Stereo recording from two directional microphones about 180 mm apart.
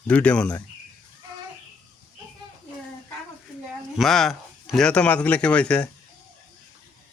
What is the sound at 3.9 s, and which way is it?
Speech, centre (ahead or behind).